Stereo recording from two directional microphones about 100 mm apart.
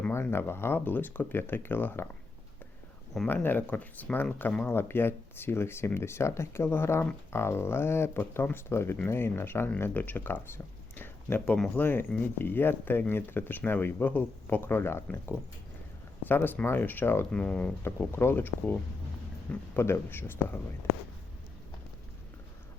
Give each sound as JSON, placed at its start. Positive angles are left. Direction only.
{"t": 0.1, "sound": "speech", "side_deg": 25}
{"t": 3.2, "sound": "speech", "side_deg": 20}
{"t": 11.8, "sound": "speech", "side_deg": 20}
{"t": 16.2, "sound": "speech", "side_deg": 20}
{"t": 17.8, "sound": "speech", "side_deg": 25}